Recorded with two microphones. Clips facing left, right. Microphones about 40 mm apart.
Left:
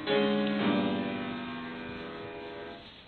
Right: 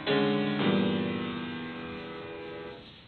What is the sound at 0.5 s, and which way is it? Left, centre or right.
Music, centre.